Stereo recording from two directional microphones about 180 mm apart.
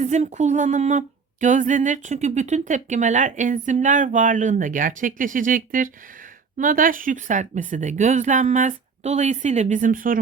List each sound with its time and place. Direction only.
0.0 s speech: 40° right (ahead or behind)